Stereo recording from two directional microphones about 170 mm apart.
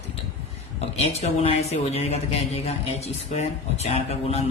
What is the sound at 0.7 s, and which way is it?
Speech, 35° left (ahead or behind).